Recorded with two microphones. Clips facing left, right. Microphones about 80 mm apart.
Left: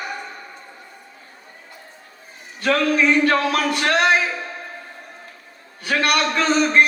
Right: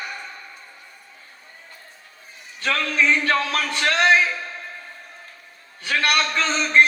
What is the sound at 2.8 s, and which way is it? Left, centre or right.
Speech, left.